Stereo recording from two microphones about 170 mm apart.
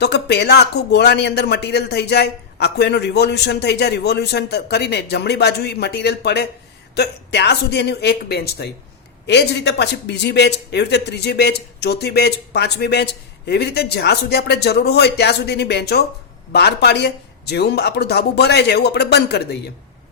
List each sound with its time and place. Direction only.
0.0 s a man's voice: 80° left
9.2 s a man's voice: 90° left